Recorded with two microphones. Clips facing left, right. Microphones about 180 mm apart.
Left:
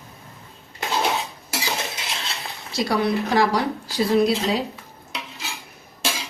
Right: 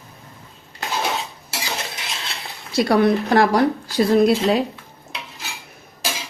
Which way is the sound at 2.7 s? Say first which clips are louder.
Right 5 dB; 55° right (ahead or behind).